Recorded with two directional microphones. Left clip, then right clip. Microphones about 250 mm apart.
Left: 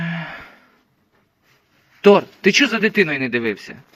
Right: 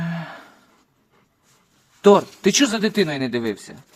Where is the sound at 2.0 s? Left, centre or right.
Centre.